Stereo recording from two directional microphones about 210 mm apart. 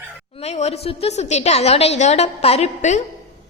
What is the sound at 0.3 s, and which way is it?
A woman's voice, 30° left (ahead or behind).